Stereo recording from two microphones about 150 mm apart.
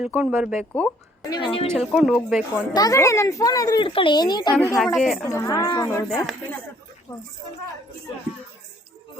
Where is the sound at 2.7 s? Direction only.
25° left (ahead or behind).